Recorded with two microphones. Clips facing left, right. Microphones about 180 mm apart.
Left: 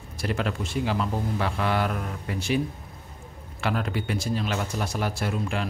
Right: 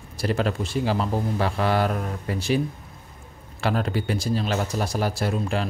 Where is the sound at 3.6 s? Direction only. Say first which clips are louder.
Right 3 dB; 35° right (ahead or behind).